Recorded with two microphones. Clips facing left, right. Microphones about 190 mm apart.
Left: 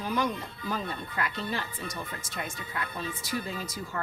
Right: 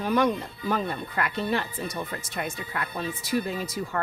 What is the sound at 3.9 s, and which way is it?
Speech, 60° right (ahead or behind).